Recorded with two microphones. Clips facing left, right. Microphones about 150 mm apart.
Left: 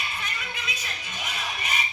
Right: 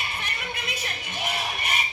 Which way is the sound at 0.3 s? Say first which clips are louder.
Right 2 dB; 55° right (ahead or behind).